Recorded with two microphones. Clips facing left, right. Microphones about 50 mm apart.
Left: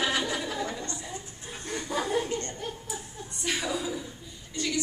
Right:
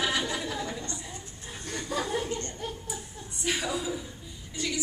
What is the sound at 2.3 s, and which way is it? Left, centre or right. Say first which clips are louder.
Chuckle: left 1 dB; left.